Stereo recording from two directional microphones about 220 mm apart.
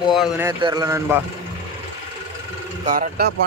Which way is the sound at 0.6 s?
20° right (ahead or behind).